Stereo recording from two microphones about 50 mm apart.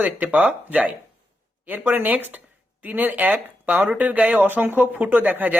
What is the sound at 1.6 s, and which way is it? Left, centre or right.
Speech, right.